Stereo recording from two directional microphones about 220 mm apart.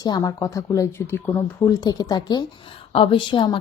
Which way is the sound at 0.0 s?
15° left (ahead or behind).